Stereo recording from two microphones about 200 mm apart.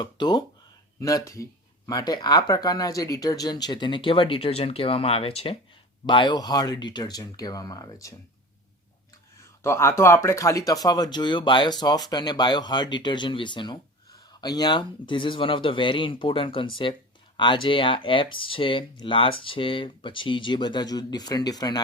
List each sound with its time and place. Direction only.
0.0 s speech: 20° left (ahead or behind)
9.6 s speech: 15° left (ahead or behind)